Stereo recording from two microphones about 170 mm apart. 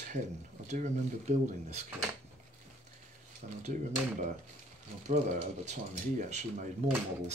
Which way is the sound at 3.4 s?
50° right (ahead or behind).